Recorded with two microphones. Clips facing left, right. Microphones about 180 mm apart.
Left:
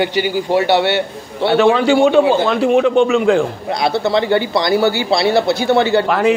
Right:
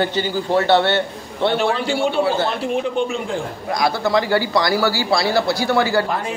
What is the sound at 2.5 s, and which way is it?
Speech, 85° left.